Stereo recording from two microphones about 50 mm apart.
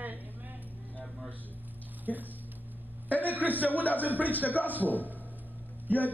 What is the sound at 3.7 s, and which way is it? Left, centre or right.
Speech, left.